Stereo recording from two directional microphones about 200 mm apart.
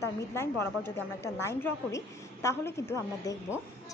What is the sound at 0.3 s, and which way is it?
A woman's voice, 10° left (ahead or behind).